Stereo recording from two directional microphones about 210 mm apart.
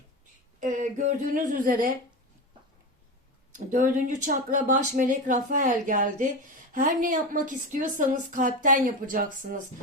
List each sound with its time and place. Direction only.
0.6 s a woman's voice: 35° right (ahead or behind)
3.7 s a woman's voice: 40° right (ahead or behind)